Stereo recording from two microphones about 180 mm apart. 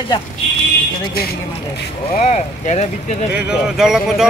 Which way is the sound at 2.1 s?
40° left (ahead or behind).